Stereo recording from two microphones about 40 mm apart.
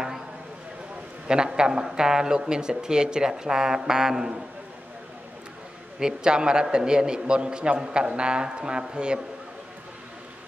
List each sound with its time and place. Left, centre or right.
1.2 s speech: centre
5.9 s a man's voice: centre